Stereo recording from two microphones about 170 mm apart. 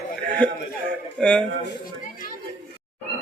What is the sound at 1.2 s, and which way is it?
Speech, 5° left (ahead or behind).